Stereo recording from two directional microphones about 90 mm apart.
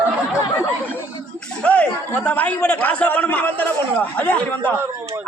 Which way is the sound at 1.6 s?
15° left (ahead or behind).